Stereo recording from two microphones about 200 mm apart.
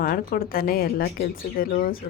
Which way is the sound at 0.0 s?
45° left (ahead or behind).